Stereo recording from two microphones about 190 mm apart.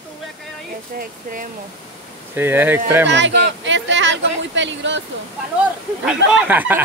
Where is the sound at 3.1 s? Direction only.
70° right (ahead or behind).